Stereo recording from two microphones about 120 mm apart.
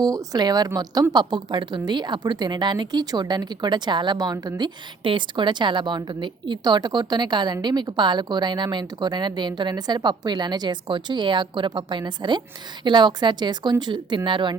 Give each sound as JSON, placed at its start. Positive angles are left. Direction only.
{"t": 0.0, "sound": "a woman's voice", "side_deg": -35}